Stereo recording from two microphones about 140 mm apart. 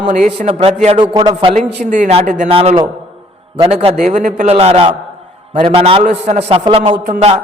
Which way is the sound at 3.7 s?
45° right (ahead or behind).